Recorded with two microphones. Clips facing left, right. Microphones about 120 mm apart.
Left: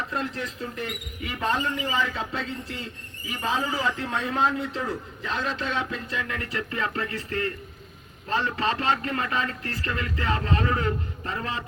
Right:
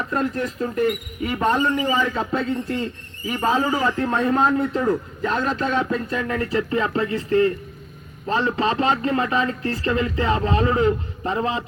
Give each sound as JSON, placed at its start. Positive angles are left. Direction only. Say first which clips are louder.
{"t": 0.1, "sound": "speech", "louder": "right 7 dB", "side_deg": -45}